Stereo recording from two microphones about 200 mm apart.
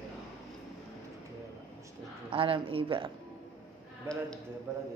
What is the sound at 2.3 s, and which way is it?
Speech, 25° right (ahead or behind).